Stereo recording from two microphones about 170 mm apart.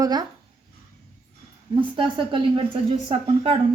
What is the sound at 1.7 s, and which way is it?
Speech, 30° right (ahead or behind).